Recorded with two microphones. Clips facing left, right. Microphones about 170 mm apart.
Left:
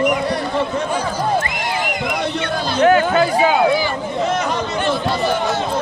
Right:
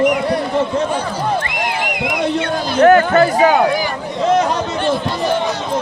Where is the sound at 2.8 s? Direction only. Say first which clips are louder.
Right 4 dB; 55° right (ahead or behind).